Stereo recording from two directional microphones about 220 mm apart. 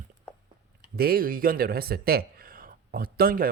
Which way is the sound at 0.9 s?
45° right (ahead or behind).